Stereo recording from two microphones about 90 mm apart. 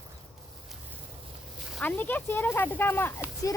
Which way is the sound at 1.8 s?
20° left (ahead or behind).